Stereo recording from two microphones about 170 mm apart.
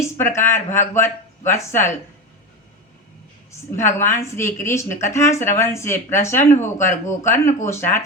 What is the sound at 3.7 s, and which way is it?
Mantra, 15° left (ahead or behind).